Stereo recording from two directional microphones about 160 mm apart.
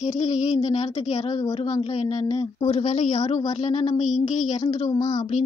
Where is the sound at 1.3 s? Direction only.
30° left (ahead or behind).